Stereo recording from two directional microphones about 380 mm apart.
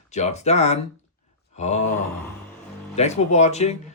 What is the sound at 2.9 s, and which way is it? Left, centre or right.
Speech, centre.